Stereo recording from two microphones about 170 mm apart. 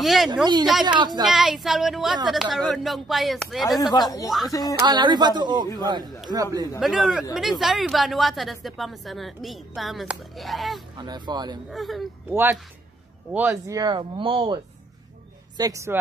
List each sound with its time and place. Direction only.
0.0 s a woman's voice: centre (ahead or behind)
0.8 s speech: 25° right (ahead or behind)
1.2 s a woman's voice: 5° right (ahead or behind)
3.8 s speech: 25° left (ahead or behind)
4.8 s speech: 25° right (ahead or behind)
6.8 s a woman's voice: centre (ahead or behind)
11.0 s speech: 25° right (ahead or behind)
11.7 s a woman's voice: centre (ahead or behind)
12.3 s speech: 10° right (ahead or behind)
13.7 s speech: 25° right (ahead or behind)
15.5 s speech: 20° right (ahead or behind)